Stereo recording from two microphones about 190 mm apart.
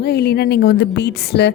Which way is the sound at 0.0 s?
55° left (ahead or behind).